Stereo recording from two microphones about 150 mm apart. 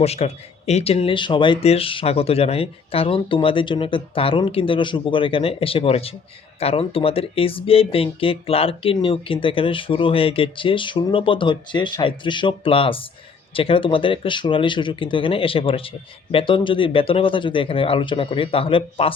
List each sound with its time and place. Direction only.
0.0 s speech: 45° left (ahead or behind)